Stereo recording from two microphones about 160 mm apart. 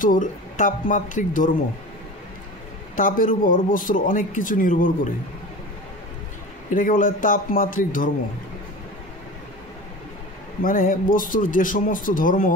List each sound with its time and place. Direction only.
0.0 s speech: 55° left (ahead or behind)
3.0 s speech: 60° left (ahead or behind)
6.7 s speech: 60° left (ahead or behind)
10.6 s speech: 60° left (ahead or behind)